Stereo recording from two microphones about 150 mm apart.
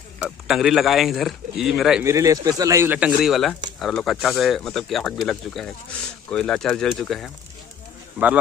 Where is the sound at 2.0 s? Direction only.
20° right (ahead or behind); by 7.3 s centre (ahead or behind).